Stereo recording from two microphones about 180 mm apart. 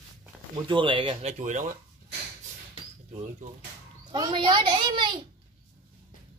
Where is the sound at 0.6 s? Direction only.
25° right (ahead or behind); by 1.8 s 45° right (ahead or behind).